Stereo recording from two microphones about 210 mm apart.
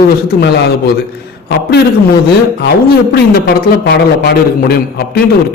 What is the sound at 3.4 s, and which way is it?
A man's voice, 50° left (ahead or behind).